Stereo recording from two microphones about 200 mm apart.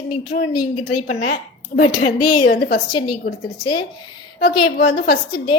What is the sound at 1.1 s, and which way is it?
Speech, 35° left (ahead or behind).